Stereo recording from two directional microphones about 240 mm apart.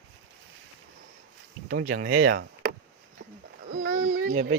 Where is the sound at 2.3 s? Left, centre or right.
Right.